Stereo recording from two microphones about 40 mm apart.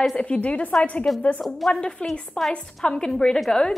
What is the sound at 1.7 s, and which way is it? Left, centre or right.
A woman's voice, left.